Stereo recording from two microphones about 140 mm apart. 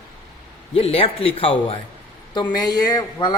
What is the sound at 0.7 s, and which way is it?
Speech, 45° left (ahead or behind).